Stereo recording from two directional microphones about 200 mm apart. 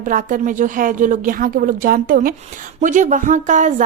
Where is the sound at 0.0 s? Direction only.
40° right (ahead or behind).